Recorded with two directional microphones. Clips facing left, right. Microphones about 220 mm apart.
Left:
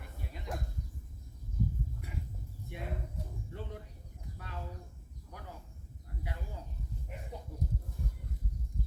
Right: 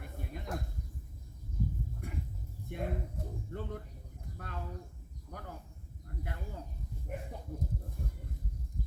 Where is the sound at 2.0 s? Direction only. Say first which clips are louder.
Right 4 dB; 50° right (ahead or behind).